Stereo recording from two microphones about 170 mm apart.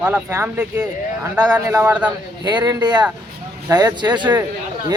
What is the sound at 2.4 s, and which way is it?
Speech, 25° right (ahead or behind).